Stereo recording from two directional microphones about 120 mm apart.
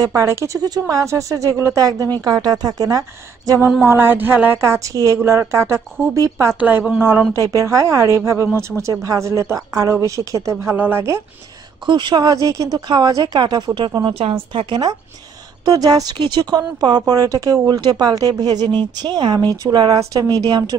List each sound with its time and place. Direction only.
0.0 s a woman's voice: 25° right (ahead or behind)
6.6 s a woman's voice: 10° right (ahead or behind)
11.8 s a woman's voice: 40° right (ahead or behind)
12.7 s a woman's voice: 40° right (ahead or behind)